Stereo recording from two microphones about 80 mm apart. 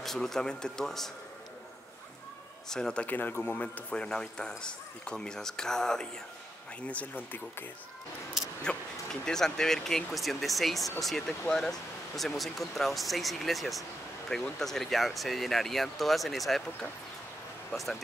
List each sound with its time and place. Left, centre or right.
0.0 s speech: centre
2.7 s speech: centre
6.9 s speech: left
8.6 s speech: centre